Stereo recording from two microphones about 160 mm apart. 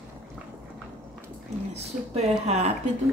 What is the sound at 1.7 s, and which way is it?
Speech, 40° right (ahead or behind).